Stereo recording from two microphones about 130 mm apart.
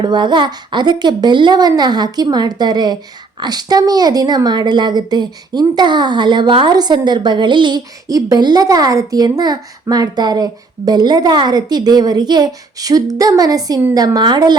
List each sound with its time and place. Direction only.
0.0 s a woman's voice: 35° right (ahead or behind)